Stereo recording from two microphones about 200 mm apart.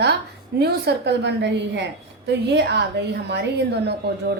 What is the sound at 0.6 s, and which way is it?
A woman's voice, 55° right (ahead or behind).